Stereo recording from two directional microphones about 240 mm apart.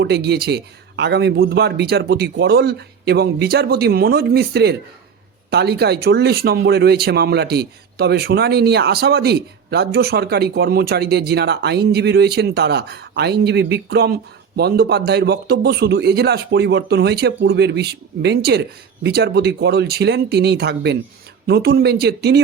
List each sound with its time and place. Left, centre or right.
0.0 s speech: right